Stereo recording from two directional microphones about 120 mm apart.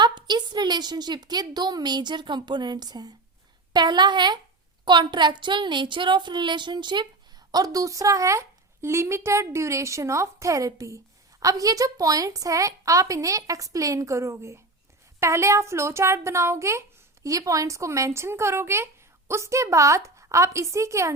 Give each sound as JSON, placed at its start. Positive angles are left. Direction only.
{"t": 0.0, "sound": "a woman's voice", "side_deg": -40}